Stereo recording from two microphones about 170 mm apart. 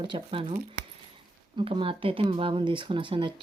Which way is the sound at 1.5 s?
30° right (ahead or behind).